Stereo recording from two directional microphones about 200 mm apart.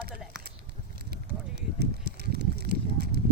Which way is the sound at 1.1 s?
55° right (ahead or behind).